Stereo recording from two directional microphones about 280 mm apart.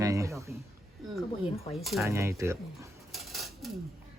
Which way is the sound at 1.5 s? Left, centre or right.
Left.